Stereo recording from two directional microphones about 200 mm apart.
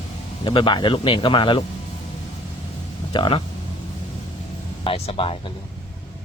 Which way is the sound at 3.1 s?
25° left (ahead or behind).